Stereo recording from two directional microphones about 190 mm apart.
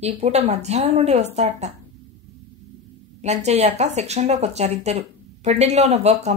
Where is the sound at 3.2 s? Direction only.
35° right (ahead or behind).